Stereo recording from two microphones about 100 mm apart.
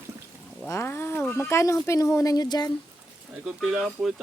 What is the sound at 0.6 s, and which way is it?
Speech, 25° left (ahead or behind).